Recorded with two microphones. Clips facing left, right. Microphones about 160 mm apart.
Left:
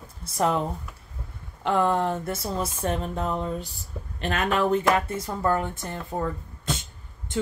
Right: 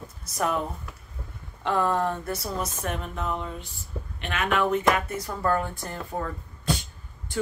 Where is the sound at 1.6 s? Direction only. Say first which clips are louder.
Left 2 dB; 25° left (ahead or behind).